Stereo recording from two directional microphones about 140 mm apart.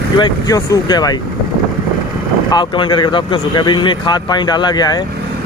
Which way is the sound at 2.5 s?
35° left (ahead or behind).